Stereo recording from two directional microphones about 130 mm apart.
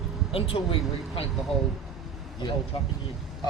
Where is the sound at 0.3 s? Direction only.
45° left (ahead or behind).